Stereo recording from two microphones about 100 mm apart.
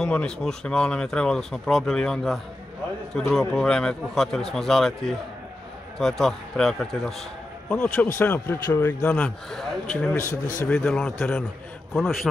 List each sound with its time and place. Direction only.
0.0 s speech: 10° left (ahead or behind)
7.7 s a man's voice: 25° left (ahead or behind)
9.5 s speech: 5° left (ahead or behind)
10.1 s a man's voice: 30° left (ahead or behind)
10.7 s a man's voice: 15° left (ahead or behind)
11.9 s speech: centre (ahead or behind)